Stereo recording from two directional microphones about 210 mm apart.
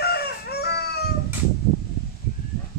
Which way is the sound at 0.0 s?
50° left (ahead or behind).